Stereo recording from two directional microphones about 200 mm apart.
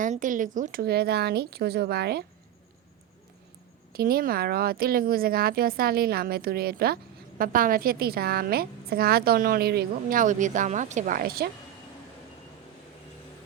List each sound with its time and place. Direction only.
0.0 s speech: 40° right (ahead or behind)
3.9 s speech: 45° right (ahead or behind)